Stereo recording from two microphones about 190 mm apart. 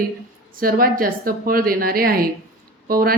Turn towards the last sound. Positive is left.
turn(degrees=-50)  # may be behind; listen again after turning